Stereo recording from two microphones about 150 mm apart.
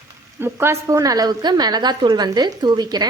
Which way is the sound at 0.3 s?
15° right (ahead or behind).